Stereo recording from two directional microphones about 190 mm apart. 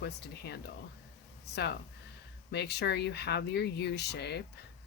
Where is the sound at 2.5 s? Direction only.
60° left (ahead or behind).